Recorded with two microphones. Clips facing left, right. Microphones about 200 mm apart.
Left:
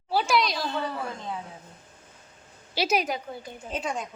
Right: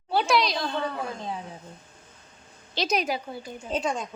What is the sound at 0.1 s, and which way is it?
Speech, centre (ahead or behind).